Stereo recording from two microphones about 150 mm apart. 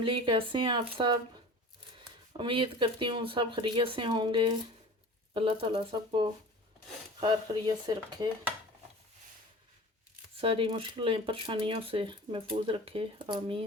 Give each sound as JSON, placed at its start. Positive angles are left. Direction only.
{"t": 0.0, "sound": "speech", "side_deg": -35}
{"t": 2.3, "sound": "speech", "side_deg": -35}
{"t": 10.4, "sound": "speech", "side_deg": -35}